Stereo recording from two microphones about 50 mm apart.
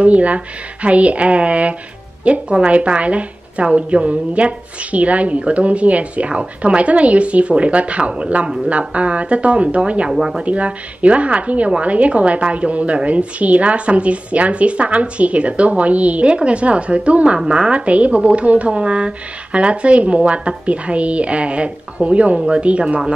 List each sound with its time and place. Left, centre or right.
0.0 s a woman's voice: right